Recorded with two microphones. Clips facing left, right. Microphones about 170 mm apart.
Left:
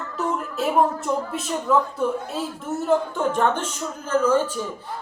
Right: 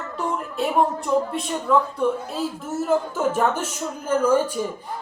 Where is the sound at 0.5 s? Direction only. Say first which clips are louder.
Even; centre (ahead or behind).